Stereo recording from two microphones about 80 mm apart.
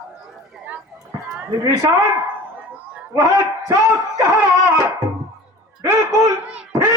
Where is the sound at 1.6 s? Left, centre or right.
Right.